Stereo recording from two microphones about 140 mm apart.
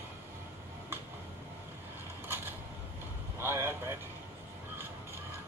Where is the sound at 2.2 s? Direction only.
15° right (ahead or behind).